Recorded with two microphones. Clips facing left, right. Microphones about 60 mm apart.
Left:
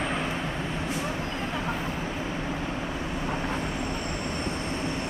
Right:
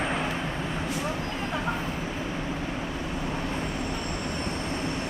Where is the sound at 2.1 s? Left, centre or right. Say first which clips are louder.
Even; centre.